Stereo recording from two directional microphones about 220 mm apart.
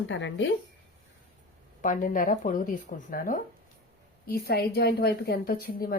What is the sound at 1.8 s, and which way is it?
A woman's voice, 40° left (ahead or behind).